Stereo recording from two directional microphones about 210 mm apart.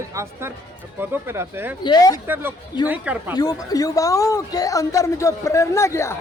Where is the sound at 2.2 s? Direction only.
10° right (ahead or behind).